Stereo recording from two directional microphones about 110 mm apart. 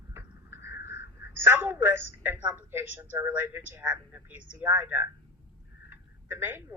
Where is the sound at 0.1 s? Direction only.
25° right (ahead or behind).